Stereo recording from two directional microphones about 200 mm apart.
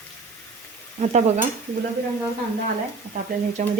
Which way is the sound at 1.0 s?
35° right (ahead or behind).